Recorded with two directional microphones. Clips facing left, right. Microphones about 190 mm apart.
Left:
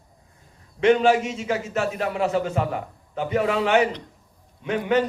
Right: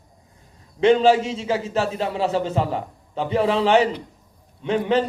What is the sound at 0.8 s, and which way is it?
A man's voice, 30° right (ahead or behind).